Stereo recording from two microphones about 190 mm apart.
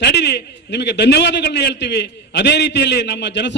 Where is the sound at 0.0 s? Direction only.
60° left (ahead or behind).